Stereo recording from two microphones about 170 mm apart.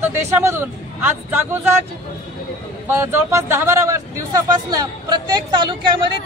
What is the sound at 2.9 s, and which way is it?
Speech, 15° right (ahead or behind).